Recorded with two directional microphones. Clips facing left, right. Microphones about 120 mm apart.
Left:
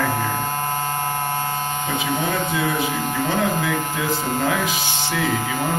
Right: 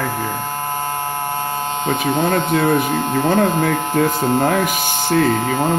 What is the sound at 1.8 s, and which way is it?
Speech, 55° right (ahead or behind).